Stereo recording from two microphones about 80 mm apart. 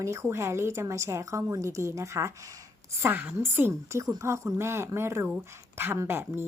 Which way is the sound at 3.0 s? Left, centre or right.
Right.